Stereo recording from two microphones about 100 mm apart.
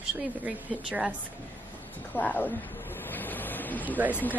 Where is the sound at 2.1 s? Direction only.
15° left (ahead or behind).